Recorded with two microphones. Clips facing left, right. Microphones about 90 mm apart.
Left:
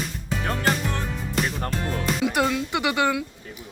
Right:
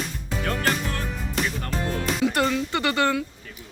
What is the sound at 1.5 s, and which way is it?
Music, 40° left (ahead or behind).